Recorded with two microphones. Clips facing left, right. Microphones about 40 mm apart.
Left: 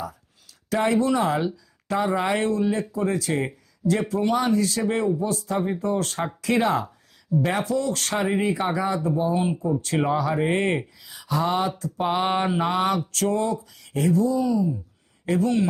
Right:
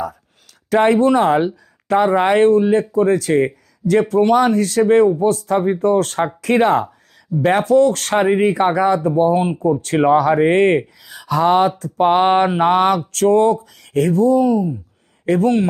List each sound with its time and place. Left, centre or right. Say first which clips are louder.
0.7 s speech: right 8 dB; right